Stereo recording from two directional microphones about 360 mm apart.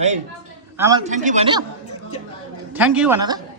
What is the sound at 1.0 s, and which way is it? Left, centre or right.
Speech, centre.